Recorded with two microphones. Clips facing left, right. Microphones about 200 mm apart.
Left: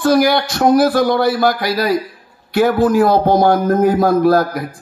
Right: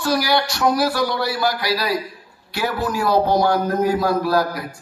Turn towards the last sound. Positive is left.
turn(degrees=50)  # may be behind; listen again after turning